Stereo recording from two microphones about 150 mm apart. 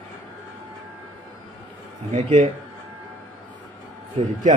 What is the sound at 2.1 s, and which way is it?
Speech, 45° right (ahead or behind).